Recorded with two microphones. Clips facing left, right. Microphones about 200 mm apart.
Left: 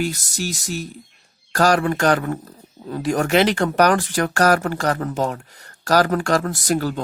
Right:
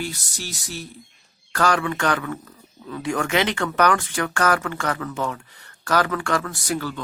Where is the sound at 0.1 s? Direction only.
45° left (ahead or behind).